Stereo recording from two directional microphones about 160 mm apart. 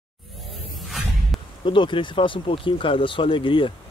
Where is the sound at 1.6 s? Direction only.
30° left (ahead or behind).